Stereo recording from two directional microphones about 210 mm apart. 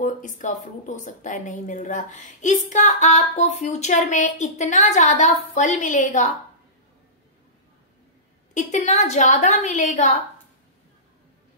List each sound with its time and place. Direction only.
0.0 s speech: 35° left (ahead or behind)
8.5 s speech: 35° left (ahead or behind)